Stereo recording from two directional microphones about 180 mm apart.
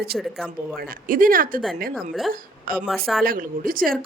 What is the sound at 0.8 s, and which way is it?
Speech, 50° right (ahead or behind).